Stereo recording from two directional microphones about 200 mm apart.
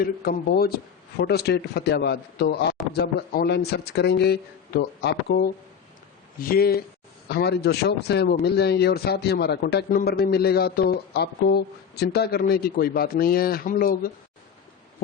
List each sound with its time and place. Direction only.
0.0 s a man's voice: 50° left (ahead or behind)